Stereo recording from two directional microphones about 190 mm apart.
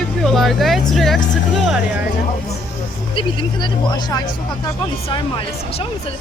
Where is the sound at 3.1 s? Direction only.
25° left (ahead or behind).